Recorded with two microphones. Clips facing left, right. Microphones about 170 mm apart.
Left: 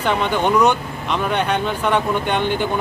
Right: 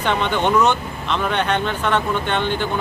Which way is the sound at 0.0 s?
10° left (ahead or behind).